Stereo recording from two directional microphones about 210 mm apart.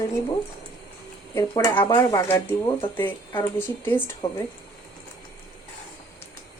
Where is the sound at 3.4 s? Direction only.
10° left (ahead or behind).